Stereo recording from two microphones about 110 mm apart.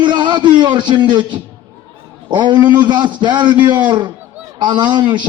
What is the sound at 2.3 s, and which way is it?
Speech, 45° right (ahead or behind).